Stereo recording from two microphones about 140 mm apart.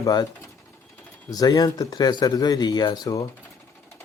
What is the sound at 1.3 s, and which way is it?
Speech, 25° left (ahead or behind).